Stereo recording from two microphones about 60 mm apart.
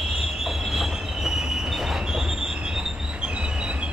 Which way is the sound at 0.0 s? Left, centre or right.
Centre.